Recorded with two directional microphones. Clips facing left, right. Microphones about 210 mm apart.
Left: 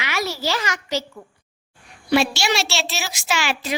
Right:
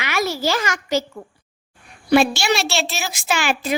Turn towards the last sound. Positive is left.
turn(degrees=-50)  # may be behind; listen again after turning